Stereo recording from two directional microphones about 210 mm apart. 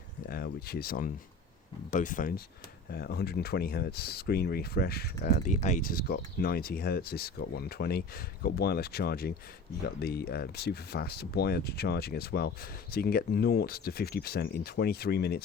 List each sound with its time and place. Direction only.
0.3 s speech: 45° left (ahead or behind)